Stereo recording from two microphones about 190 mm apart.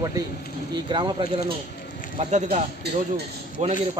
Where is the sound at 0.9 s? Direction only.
25° right (ahead or behind).